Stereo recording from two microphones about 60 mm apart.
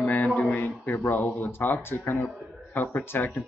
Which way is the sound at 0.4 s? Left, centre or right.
Left.